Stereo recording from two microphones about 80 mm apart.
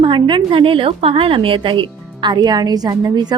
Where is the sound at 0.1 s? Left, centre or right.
Right.